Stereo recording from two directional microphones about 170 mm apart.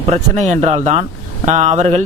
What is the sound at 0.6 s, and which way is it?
Speech, 35° right (ahead or behind).